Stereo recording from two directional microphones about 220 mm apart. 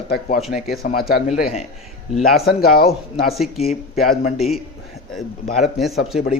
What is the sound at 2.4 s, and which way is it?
Speech, 45° left (ahead or behind).